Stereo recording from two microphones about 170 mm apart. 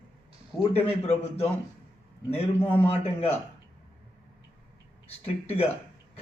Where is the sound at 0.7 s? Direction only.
35° left (ahead or behind).